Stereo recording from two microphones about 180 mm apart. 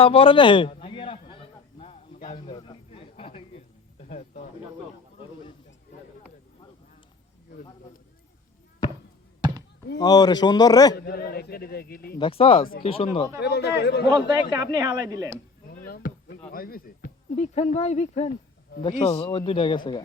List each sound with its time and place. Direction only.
0.0 s a sound: 30° left (ahead or behind)
10.0 s speech: 20° left (ahead or behind)
10.9 s a man's voice: 60° left (ahead or behind)
12.2 s speech: 30° left (ahead or behind)
13.4 s speech: 70° left (ahead or behind)
14.5 s speech: 20° right (ahead or behind)
15.9 s a sound: 50° left (ahead or behind)
16.5 s speech: 55° left (ahead or behind)
17.3 s speech: 35° left (ahead or behind)
18.8 s speech: 25° left (ahead or behind)